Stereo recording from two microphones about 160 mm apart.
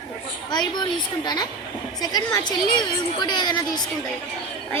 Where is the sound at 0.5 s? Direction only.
25° left (ahead or behind).